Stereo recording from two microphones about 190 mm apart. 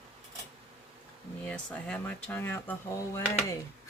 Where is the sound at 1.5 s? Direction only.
5° left (ahead or behind).